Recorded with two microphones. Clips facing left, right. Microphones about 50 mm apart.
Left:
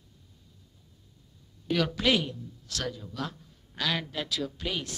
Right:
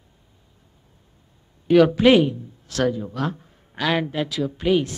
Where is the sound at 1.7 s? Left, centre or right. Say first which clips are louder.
Right 12 dB; right.